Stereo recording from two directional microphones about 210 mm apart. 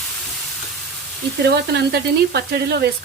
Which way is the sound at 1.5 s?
50° right (ahead or behind).